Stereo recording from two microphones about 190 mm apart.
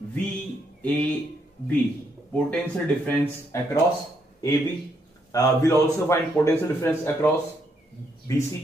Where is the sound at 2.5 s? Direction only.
10° left (ahead or behind).